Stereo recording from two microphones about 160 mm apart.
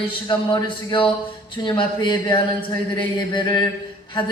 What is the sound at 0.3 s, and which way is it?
Speech, 30° left (ahead or behind).